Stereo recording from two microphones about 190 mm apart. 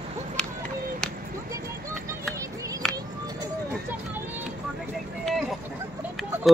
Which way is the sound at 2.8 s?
5° left (ahead or behind).